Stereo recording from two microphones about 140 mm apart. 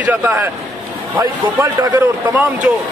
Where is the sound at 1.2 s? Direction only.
25° right (ahead or behind).